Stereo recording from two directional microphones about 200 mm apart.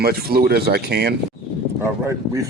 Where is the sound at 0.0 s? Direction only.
50° right (ahead or behind).